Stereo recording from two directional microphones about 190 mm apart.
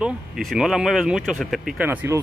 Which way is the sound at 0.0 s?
Centre (ahead or behind).